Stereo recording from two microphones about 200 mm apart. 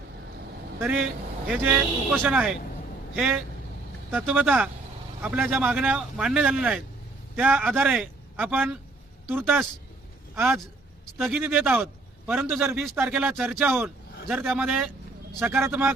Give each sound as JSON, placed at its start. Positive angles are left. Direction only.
{"t": 0.8, "sound": "a man's voice", "side_deg": -5}